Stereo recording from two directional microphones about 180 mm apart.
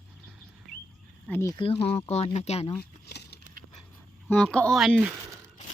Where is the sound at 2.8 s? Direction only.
60° left (ahead or behind).